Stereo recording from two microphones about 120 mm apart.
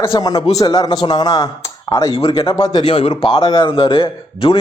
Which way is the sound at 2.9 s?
50° left (ahead or behind).